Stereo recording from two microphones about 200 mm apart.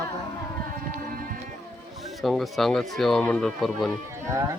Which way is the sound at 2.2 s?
Centre (ahead or behind).